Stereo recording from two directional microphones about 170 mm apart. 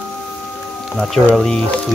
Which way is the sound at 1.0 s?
Centre (ahead or behind).